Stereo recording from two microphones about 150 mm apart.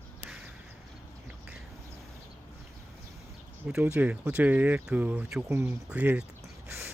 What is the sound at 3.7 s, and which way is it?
Speech, 10° right (ahead or behind).